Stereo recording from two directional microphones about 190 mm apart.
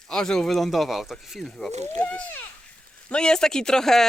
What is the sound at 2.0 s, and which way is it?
Speech, 10° left (ahead or behind).